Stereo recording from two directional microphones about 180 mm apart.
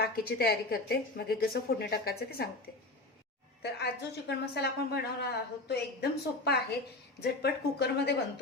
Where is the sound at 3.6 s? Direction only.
65° left (ahead or behind).